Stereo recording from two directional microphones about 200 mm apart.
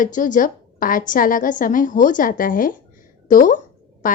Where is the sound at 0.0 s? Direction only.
40° left (ahead or behind).